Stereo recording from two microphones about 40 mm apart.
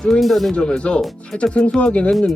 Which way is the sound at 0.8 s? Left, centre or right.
Left.